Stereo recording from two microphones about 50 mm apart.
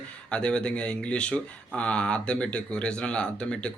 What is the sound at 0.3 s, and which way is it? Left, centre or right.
Speech, centre.